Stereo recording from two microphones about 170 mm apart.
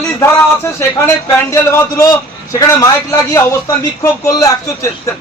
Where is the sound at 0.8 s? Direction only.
15° left (ahead or behind).